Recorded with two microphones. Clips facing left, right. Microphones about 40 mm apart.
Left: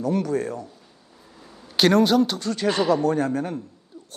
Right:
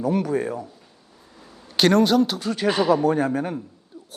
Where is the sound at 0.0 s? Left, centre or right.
Centre.